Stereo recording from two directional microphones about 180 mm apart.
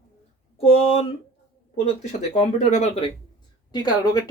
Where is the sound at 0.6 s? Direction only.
30° left (ahead or behind).